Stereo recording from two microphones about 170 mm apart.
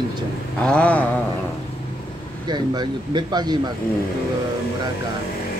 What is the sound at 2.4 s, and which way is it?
Speech, 25° right (ahead or behind).